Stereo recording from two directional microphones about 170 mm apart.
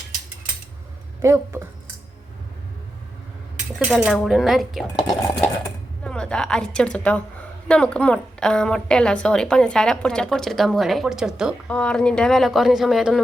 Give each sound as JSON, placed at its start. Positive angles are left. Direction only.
{"t": 1.2, "sound": "speech", "side_deg": -15}
{"t": 3.8, "sound": "a woman's voice", "side_deg": 0}